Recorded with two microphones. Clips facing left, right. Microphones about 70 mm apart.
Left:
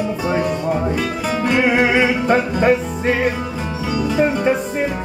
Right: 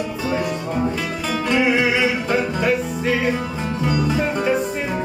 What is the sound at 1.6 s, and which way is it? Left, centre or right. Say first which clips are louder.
Music: left 3 dB; left.